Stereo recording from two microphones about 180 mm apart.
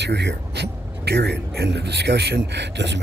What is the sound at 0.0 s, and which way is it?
Speech, 70° right (ahead or behind).